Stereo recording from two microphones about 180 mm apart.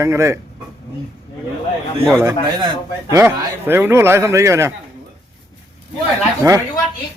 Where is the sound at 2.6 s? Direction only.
15° right (ahead or behind).